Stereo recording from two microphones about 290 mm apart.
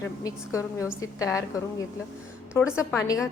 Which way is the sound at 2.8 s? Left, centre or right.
Centre.